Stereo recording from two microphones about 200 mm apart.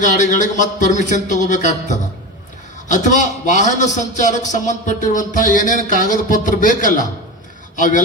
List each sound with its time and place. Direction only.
0.0 s a man's voice: 40° left (ahead or behind)